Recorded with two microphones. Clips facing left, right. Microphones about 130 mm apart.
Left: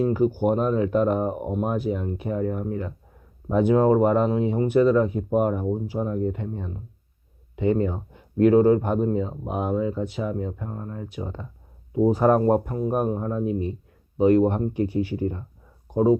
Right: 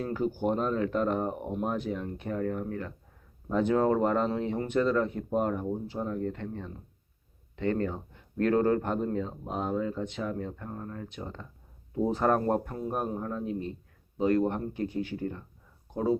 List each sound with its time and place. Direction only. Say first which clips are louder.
0.0 s speech: left 8 dB; 10° left (ahead or behind)
13.1 s speech: left 7 dB; 25° left (ahead or behind)
13.3 s speech: left 7 dB; 15° left (ahead or behind)